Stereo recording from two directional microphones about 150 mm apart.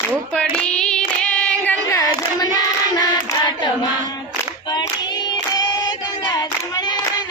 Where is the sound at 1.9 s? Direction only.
20° left (ahead or behind).